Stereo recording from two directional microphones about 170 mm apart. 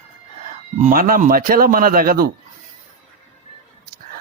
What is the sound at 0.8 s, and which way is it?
Speech, 55° right (ahead or behind).